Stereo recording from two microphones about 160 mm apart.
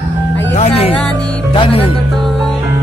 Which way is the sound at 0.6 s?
40° left (ahead or behind).